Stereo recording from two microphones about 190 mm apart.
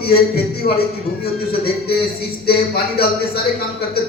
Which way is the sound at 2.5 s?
55° left (ahead or behind).